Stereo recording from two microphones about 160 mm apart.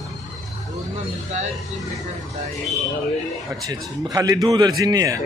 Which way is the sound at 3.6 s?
20° right (ahead or behind).